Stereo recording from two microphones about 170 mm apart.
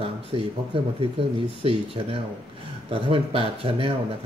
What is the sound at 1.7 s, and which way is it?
Speech, 35° right (ahead or behind).